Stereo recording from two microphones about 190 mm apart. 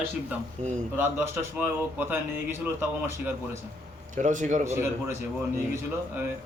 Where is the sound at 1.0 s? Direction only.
10° right (ahead or behind).